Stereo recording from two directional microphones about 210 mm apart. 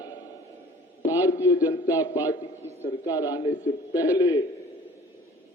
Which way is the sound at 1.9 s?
15° left (ahead or behind).